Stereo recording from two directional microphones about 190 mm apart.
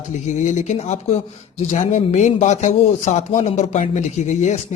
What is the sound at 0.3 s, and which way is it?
Speech, 40° left (ahead or behind).